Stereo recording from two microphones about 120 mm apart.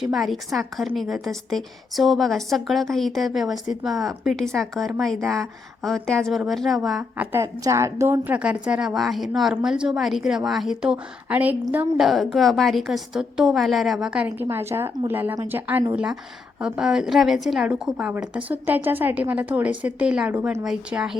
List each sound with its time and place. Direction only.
0.0 s a woman's voice: centre (ahead or behind)
7.3 s a woman's voice: 25° right (ahead or behind)
11.9 s a woman's voice: centre (ahead or behind)
14.4 s a woman's voice: 20° right (ahead or behind); by 21.2 s 5° right (ahead or behind)